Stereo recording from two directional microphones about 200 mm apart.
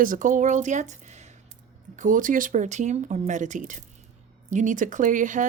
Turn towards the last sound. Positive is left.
turn(degrees=-40)  # may be behind; listen again after turning